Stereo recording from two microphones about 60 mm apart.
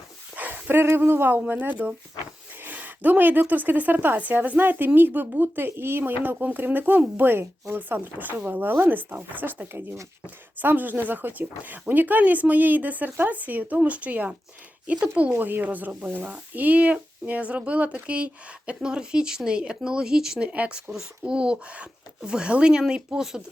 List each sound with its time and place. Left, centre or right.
0.3 s speech: right
15.3 s speech: right; by 20.5 s centre
20.5 s speech: right